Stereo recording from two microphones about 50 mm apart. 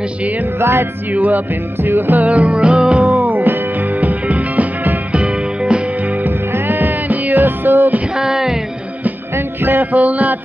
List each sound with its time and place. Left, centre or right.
0.2 s music: right
0.6 s music: right
1.1 s music: right
2.2 s music: right
3.1 s music: right
5.1 s music: centre
6.5 s music: right
8.1 s a sound: centre
9.3 s music: right
9.9 s music: right